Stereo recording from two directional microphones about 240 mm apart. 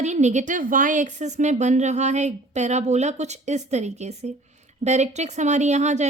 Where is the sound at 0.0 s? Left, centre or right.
Right.